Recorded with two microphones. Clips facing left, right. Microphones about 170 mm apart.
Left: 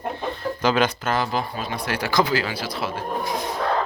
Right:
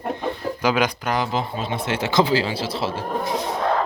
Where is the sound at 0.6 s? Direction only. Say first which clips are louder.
Even; 10° right (ahead or behind).